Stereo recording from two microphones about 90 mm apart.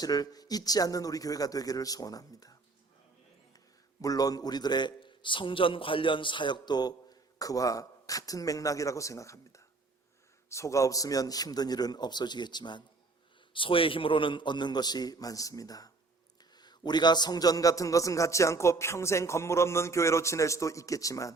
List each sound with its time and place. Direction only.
0.0 s speech: 45° left (ahead or behind)
4.0 s a man's voice: 45° left (ahead or behind)
7.3 s a man's voice: 40° left (ahead or behind)
13.5 s a man's voice: 75° left (ahead or behind); by 21.3 s 40° left (ahead or behind)